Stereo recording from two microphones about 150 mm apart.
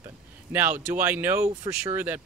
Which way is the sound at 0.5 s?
15° right (ahead or behind).